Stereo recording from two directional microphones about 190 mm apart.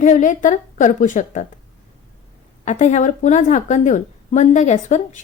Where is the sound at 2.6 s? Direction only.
40° left (ahead or behind).